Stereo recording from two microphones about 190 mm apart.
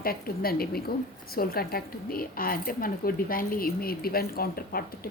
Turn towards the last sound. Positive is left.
turn(degrees=50)  # may be behind; listen again after turning